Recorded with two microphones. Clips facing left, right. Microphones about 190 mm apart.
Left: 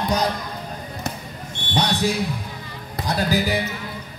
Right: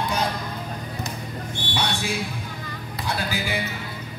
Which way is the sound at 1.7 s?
40° left (ahead or behind).